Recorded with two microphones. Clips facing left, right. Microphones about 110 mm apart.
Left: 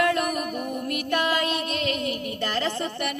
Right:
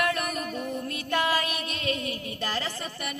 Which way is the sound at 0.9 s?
15° right (ahead or behind).